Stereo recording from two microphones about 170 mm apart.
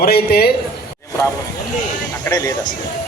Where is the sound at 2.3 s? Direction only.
20° left (ahead or behind).